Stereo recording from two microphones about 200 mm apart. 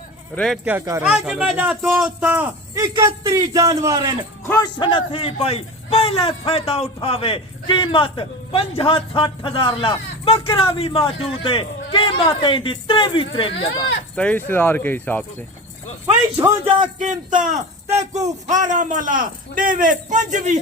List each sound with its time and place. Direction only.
0.3 s speech: centre (ahead or behind); by 4.3 s 20° right (ahead or behind)
4.4 s a man's voice: 15° left (ahead or behind)
4.8 s a man's voice: 25° left (ahead or behind)
14.2 s speech: 10° left (ahead or behind)
16.6 s a man's voice: 25° right (ahead or behind)
17.0 s a man's voice: 40° right (ahead or behind)